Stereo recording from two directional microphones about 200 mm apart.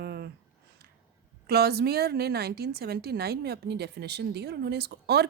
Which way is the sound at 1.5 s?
55° right (ahead or behind).